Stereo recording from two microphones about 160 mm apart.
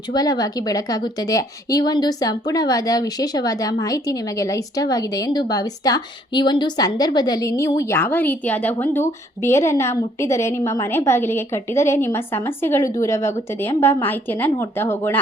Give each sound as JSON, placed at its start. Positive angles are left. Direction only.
{"t": 0.1, "sound": "speech", "side_deg": 25}